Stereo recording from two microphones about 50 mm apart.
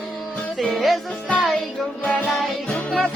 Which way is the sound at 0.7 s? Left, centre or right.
Centre.